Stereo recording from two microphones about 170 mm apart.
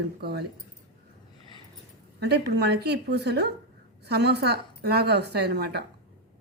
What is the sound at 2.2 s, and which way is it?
A woman's voice, 75° right (ahead or behind).